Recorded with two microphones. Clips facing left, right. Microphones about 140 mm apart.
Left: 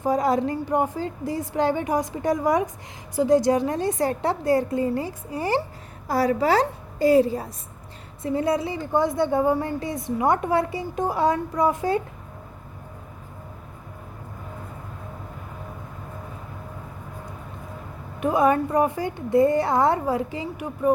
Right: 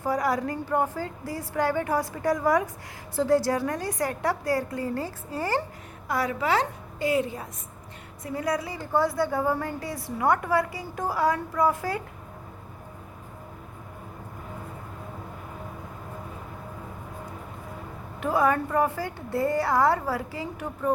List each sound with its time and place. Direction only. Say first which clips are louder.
0.0 s a woman's voice: left 4 dB; 20° left (ahead or behind)
6.1 s a woman's voice: left 5 dB; 35° left (ahead or behind)
18.2 s a woman's voice: left 4 dB; 20° left (ahead or behind)